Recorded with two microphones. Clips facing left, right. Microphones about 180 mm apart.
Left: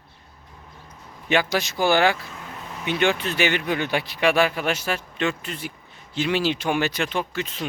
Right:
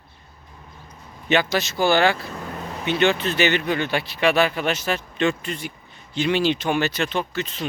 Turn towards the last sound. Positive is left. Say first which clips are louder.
# right 1 dB
turn(degrees=10)  # may be behind; listen again after turning